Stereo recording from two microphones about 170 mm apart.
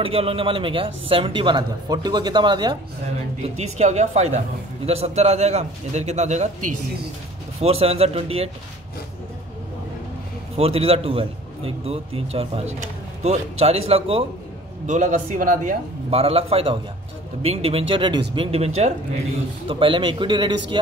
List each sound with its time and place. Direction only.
0.0 s speech: 35° right (ahead or behind)
3.4 s speech: 40° right (ahead or behind)
10.6 s speech: 35° right (ahead or behind)
14.9 s speech: 45° right (ahead or behind)
16.1 s a man's voice: 35° right (ahead or behind)